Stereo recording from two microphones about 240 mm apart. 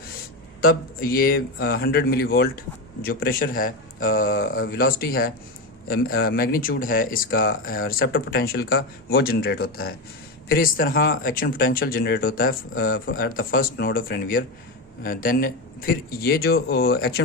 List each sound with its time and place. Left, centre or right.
0.6 s speech: left